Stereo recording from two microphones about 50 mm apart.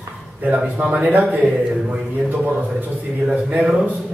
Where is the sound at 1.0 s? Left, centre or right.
Right.